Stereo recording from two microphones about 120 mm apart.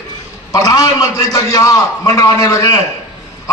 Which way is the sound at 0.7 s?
35° left (ahead or behind).